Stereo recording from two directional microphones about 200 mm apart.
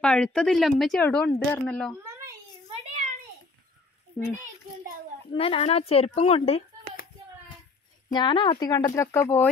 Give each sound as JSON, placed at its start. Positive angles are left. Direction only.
{"t": 0.0, "sound": "speech", "side_deg": 5}
{"t": 2.7, "sound": "a sound", "side_deg": -35}
{"t": 5.3, "sound": "speech", "side_deg": 30}
{"t": 8.1, "sound": "speech", "side_deg": 20}